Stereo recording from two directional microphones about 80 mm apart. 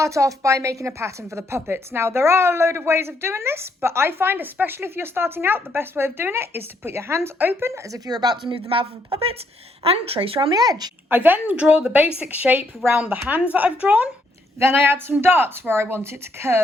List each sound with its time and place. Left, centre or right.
0.0 s a woman's voice: right
7.3 s a woman's voice: right
7.9 s speech: right
10.2 s speech: right
11.1 s a woman's voice: right
14.6 s a woman's voice: right